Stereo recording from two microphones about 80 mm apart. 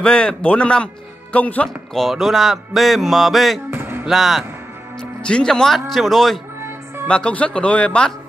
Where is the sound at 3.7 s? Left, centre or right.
Right.